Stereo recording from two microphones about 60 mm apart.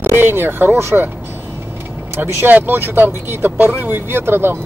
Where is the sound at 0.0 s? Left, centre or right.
Right.